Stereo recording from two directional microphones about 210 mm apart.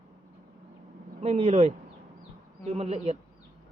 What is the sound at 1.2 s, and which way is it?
A man's voice, 30° right (ahead or behind).